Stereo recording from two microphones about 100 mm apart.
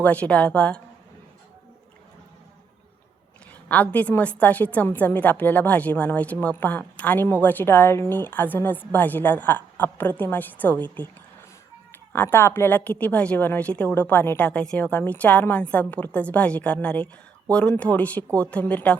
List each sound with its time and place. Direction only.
0.0 s a woman's voice: 15° left (ahead or behind)
3.7 s a woman's voice: 15° left (ahead or behind)
12.1 s a woman's voice: 20° left (ahead or behind)